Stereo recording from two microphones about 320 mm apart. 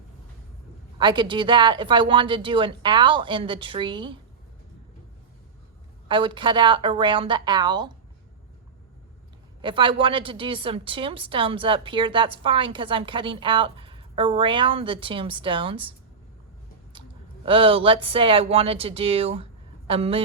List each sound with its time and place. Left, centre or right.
0.9 s a woman's voice: centre
6.1 s a woman's voice: centre
9.6 s a woman's voice: centre
17.4 s a woman's voice: centre